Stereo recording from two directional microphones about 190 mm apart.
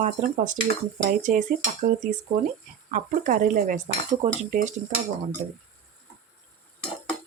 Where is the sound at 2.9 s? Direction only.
45° right (ahead or behind).